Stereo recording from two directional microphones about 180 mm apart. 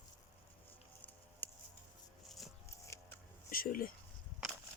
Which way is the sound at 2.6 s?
15° left (ahead or behind).